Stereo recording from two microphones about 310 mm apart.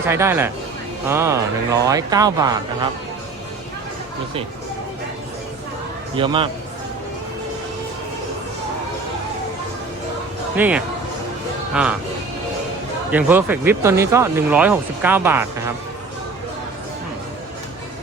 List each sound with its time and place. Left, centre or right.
0.1 s speech: centre
6.1 s speech: centre
10.5 s speech: centre
13.1 s speech: centre